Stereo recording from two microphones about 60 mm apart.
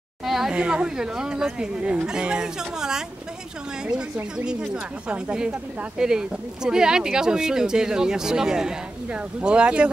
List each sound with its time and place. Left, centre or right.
0.2 s a sound: centre
0.6 s speech: centre
5.0 s speech: centre